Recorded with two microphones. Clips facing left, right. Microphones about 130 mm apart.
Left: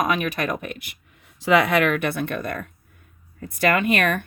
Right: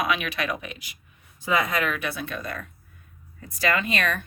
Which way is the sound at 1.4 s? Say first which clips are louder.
Left 7 dB; 75° left (ahead or behind).